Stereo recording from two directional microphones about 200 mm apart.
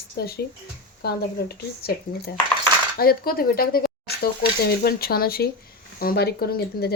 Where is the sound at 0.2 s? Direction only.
50° left (ahead or behind).